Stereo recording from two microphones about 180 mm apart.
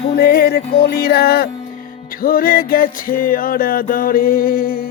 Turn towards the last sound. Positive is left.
turn(degrees=55)  # may be behind; listen again after turning